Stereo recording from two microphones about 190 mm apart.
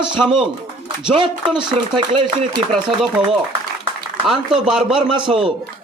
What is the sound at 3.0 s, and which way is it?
Speech, 5° right (ahead or behind).